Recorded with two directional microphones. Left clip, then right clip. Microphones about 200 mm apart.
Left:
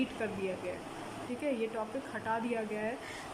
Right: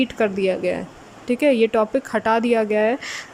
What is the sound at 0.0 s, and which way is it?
Speech, 50° right (ahead or behind).